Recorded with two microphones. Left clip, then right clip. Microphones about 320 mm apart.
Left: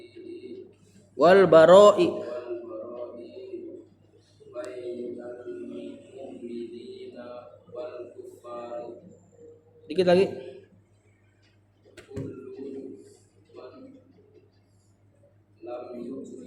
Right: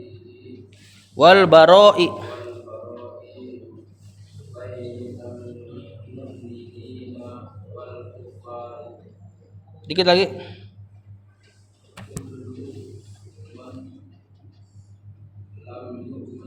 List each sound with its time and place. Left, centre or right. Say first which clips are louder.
1.2 s a man's voice: right 5 dB; right
9.8 s a man's voice: right 4 dB; right